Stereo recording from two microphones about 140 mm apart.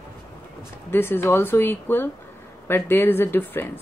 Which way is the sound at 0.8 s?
15° left (ahead or behind).